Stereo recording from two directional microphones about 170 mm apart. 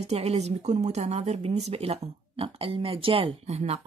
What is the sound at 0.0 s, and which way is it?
Speech, 40° right (ahead or behind).